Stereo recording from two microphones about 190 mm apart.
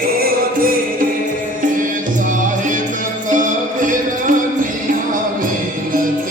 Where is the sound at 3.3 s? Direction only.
45° right (ahead or behind).